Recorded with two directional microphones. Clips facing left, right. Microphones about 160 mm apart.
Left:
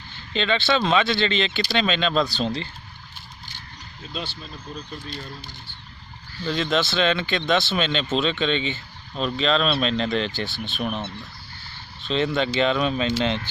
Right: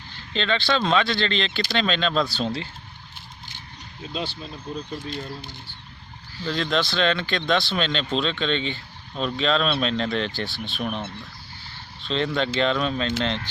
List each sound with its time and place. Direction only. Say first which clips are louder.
0.3 s speech: left 1 dB; 5° left (ahead or behind)
4.7 s speech: right 5 dB; 25° right (ahead or behind)
6.4 s speech: left 1 dB; 5° left (ahead or behind)
12.0 s speech: left 2 dB; 5° left (ahead or behind)